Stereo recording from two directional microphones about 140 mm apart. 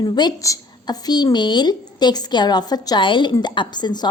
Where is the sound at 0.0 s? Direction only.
30° left (ahead or behind).